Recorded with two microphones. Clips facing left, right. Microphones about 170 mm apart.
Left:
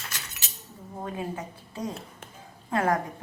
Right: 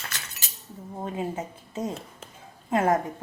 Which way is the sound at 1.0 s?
20° right (ahead or behind).